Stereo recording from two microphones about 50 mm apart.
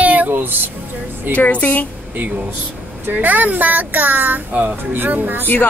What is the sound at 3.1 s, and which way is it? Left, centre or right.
Speech, right.